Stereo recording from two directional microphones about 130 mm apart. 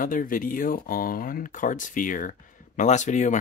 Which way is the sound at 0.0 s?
90° left.